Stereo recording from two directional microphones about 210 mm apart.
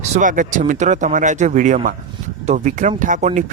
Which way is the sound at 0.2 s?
35° right (ahead or behind).